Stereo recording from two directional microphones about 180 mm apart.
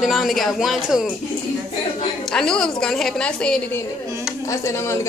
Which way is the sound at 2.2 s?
5° left (ahead or behind).